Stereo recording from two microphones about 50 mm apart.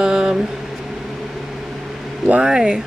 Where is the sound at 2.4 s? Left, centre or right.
Centre.